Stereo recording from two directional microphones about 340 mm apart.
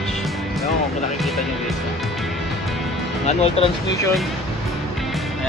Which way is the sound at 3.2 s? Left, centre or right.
Centre.